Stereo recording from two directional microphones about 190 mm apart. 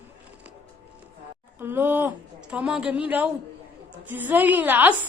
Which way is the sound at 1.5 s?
10° right (ahead or behind).